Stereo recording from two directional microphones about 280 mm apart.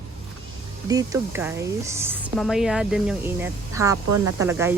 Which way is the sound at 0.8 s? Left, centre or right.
Centre.